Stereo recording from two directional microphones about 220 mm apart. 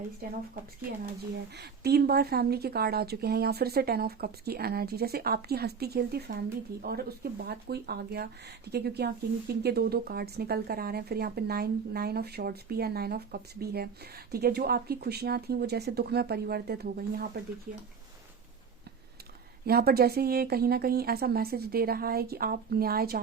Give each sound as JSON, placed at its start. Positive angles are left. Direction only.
{"t": 1.5, "sound": "speech", "side_deg": -50}
{"t": 19.6, "sound": "speech", "side_deg": -45}